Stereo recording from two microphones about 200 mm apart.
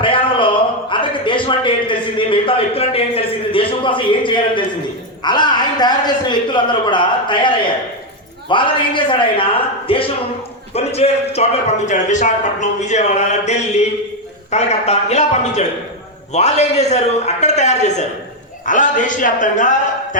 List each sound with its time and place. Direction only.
0.0 s a man's voice: 25° left (ahead or behind)